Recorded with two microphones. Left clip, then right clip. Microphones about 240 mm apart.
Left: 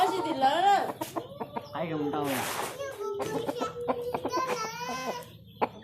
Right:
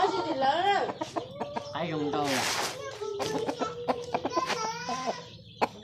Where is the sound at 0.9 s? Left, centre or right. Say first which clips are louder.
Right 1 dB; centre.